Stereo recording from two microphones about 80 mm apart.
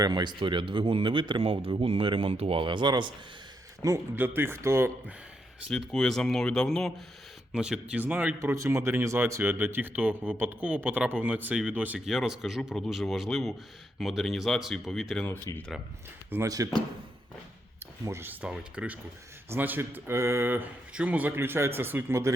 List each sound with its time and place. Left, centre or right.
0.0 s speech: right
3.8 s a man's voice: right
4.1 s speech: right
5.7 s speech: centre
7.5 s speech: centre
8.6 s speech: right
11.9 s speech: centre
15.5 s speech: left
16.3 s speech: right
18.0 s speech: right
18.4 s speech: centre; by 22.3 s right